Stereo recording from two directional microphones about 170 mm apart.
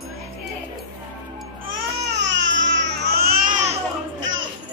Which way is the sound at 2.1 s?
90° right.